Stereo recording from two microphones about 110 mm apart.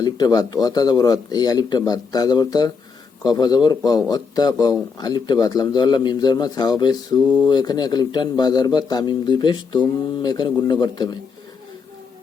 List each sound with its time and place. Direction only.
0.0 s a man's voice: 40° left (ahead or behind)